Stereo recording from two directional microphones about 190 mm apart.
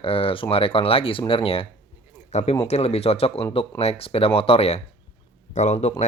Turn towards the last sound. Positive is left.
turn(degrees=35)  # may be behind; listen again after turning